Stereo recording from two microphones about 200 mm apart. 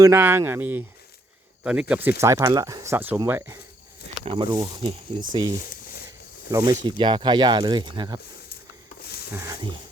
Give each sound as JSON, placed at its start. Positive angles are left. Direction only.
{"t": 0.0, "sound": "speech", "side_deg": -10}
{"t": 4.3, "sound": "speech", "side_deg": -25}
{"t": 6.5, "sound": "speech", "side_deg": -20}
{"t": 9.0, "sound": "a sound", "side_deg": 50}
{"t": 9.3, "sound": "speech", "side_deg": -15}